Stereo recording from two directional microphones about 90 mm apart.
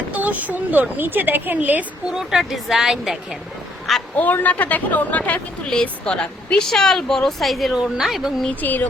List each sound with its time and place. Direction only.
0.1 s speech: 15° right (ahead or behind)
2.0 s speech: 5° right (ahead or behind)
4.2 s speech: 20° left (ahead or behind); by 8.4 s centre (ahead or behind)
8.4 s speech: 20° left (ahead or behind)